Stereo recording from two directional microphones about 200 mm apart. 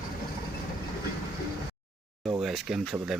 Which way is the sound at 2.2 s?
Centre (ahead or behind).